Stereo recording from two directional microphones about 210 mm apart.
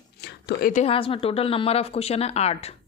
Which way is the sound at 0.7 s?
30° left (ahead or behind).